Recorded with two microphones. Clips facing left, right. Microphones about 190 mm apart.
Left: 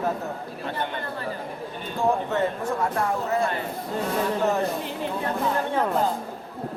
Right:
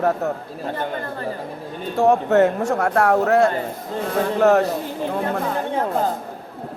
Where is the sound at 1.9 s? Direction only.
75° right (ahead or behind).